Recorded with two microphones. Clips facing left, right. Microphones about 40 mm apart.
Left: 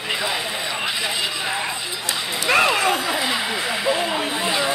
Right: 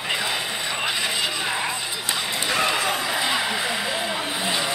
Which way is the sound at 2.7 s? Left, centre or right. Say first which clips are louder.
Left 3 dB; centre.